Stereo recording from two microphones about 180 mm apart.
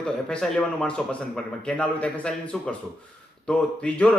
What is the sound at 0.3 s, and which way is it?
A man's voice, 5° left (ahead or behind).